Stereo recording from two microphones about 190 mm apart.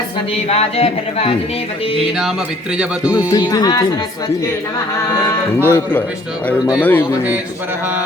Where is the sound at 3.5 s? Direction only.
20° left (ahead or behind).